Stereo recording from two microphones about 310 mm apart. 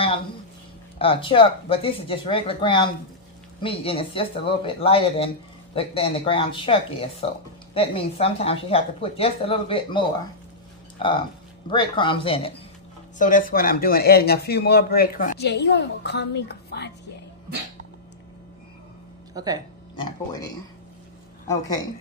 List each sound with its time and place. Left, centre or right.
0.9 s a woman's voice: centre; by 16.9 s left
19.3 s speech: centre
20.0 s a woman's voice: centre
21.5 s a woman's voice: centre